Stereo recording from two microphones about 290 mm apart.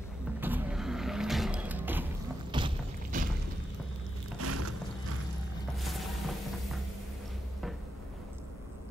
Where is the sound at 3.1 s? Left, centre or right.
Right.